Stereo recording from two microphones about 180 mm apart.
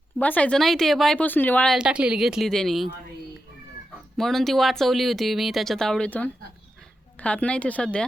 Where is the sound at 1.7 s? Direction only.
5° right (ahead or behind).